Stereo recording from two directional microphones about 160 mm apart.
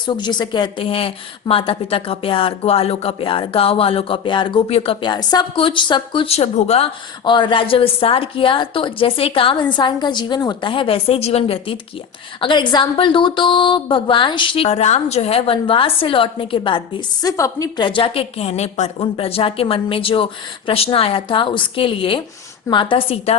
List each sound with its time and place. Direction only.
0.0 s a woman's voice: 30° left (ahead or behind)
7.3 s a woman's voice: 30° left (ahead or behind)
17.2 s a woman's voice: 20° left (ahead or behind); by 23.4 s 40° left (ahead or behind)